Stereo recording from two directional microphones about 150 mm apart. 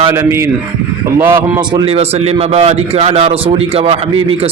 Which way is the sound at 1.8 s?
40° right (ahead or behind).